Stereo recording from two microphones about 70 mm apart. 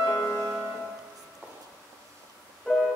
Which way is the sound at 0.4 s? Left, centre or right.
Right.